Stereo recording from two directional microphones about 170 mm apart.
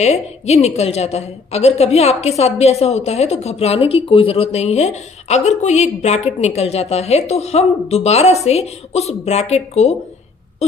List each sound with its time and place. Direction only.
0.0 s a woman's voice: 40° left (ahead or behind)